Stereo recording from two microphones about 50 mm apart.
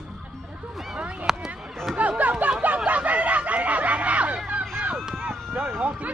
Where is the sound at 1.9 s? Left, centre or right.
Right.